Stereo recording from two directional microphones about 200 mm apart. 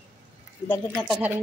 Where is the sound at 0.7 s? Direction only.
5° left (ahead or behind).